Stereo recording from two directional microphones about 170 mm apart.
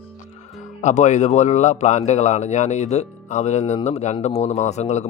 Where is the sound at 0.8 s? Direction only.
45° left (ahead or behind).